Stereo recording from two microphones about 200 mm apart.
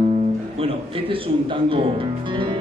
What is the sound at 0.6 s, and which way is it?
A man's voice, 25° right (ahead or behind).